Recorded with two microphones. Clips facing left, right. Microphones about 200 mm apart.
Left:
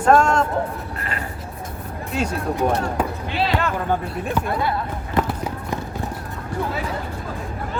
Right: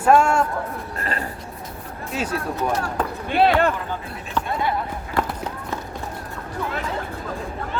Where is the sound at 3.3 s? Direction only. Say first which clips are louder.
Right 6 dB; 55° right (ahead or behind).